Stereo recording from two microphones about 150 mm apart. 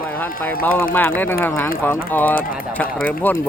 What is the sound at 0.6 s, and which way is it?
Speech, 10° left (ahead or behind).